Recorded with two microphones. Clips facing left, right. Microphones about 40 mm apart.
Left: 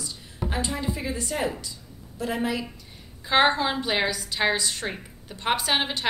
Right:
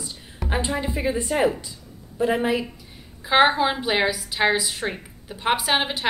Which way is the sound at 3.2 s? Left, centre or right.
Centre.